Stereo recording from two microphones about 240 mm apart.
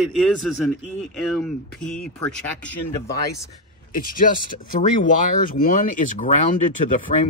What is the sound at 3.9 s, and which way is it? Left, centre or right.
Speech, left.